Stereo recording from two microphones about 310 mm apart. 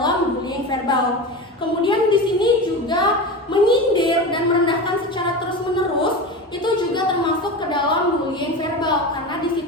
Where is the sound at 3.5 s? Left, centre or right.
Centre.